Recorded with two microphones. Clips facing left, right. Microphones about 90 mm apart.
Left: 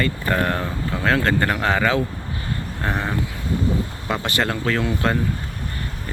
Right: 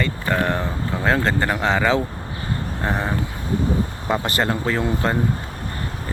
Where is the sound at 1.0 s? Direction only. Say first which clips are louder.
Even; 20° right (ahead or behind).